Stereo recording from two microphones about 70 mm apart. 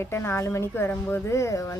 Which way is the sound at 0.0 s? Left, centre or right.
Left.